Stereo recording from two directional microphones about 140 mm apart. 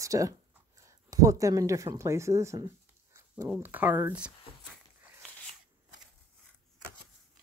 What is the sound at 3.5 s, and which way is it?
Speech, 15° right (ahead or behind).